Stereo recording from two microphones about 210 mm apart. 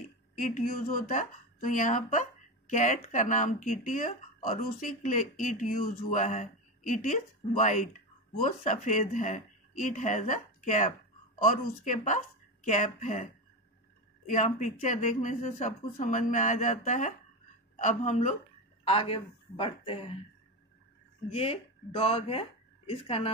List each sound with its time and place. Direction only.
0.4 s speech: 40° left (ahead or behind)
21.3 s speech: 30° left (ahead or behind)